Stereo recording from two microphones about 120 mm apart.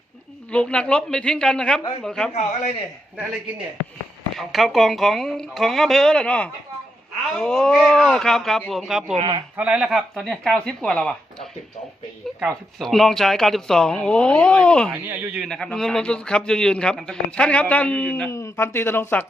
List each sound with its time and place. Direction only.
0.5 s a man's voice: 10° left (ahead or behind)
2.3 s a man's voice: 70° left (ahead or behind)
4.4 s speech: centre (ahead or behind)
14.9 s speech: 15° right (ahead or behind)
15.4 s a man's voice: 5° left (ahead or behind)